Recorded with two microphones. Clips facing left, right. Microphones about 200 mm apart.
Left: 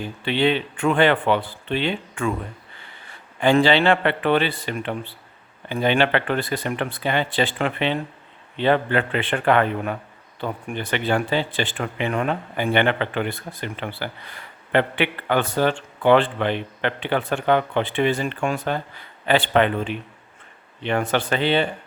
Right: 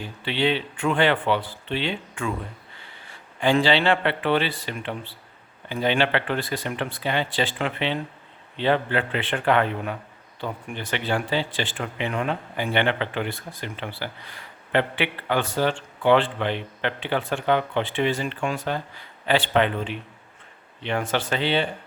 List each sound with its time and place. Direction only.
0.3 s speech: 50° left (ahead or behind)
3.4 s a man's voice: 55° left (ahead or behind)